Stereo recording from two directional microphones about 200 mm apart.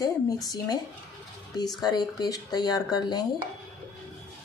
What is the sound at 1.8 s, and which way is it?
Speech, 20° left (ahead or behind).